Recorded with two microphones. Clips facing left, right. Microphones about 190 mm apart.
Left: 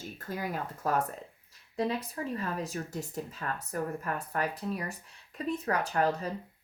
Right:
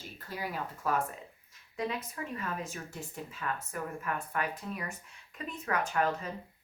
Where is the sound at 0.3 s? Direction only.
45° left (ahead or behind).